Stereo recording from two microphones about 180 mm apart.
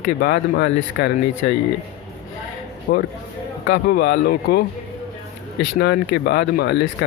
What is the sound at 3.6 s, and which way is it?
Speech, 70° left (ahead or behind).